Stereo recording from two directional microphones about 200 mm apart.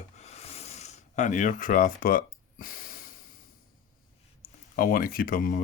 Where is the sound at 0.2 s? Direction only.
30° left (ahead or behind).